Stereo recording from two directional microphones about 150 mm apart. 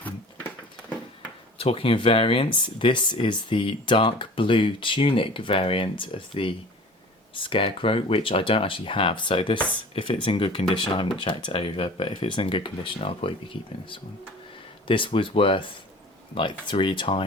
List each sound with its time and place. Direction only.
1.5 s speech: 40° left (ahead or behind)